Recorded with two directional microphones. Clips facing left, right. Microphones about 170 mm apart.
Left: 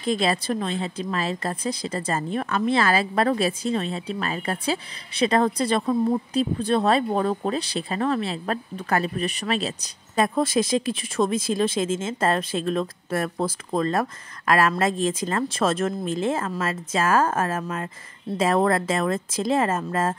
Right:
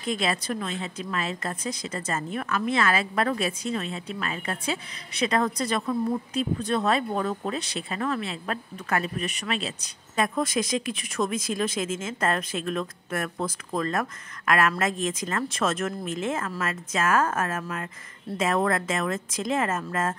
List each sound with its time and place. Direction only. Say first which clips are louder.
0.0 s speech: left 4 dB; 35° left (ahead or behind)